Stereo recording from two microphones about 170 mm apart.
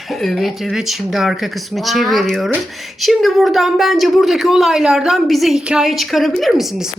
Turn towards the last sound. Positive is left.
turn(degrees=0)  # may be behind; listen again after turning